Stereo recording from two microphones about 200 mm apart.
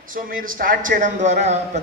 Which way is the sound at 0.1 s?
45° right (ahead or behind).